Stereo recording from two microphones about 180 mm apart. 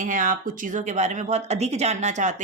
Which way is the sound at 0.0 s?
50° right (ahead or behind).